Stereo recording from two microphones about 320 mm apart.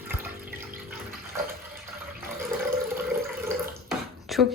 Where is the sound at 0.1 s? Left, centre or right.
Centre.